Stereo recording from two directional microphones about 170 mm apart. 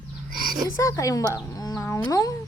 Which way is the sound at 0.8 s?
20° left (ahead or behind).